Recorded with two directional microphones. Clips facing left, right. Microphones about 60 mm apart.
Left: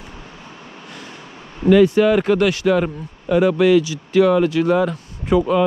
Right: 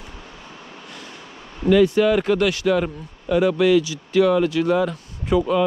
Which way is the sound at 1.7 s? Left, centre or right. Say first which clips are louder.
Left 3 dB; left.